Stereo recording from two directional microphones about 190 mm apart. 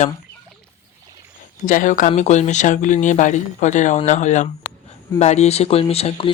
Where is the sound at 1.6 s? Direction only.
45° left (ahead or behind).